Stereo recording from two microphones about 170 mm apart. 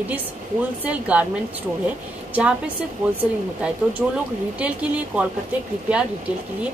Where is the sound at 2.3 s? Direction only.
10° right (ahead or behind).